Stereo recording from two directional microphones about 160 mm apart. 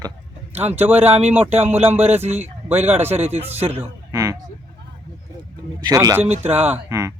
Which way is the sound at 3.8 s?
20° right (ahead or behind).